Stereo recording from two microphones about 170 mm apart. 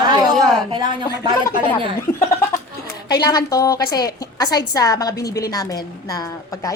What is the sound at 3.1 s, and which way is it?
A woman's voice, 25° left (ahead or behind).